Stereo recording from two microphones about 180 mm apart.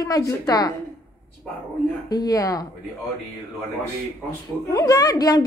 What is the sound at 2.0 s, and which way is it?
Speech, 20° left (ahead or behind).